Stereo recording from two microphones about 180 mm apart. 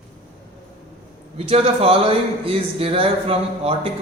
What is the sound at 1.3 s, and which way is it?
Speech, 35° right (ahead or behind).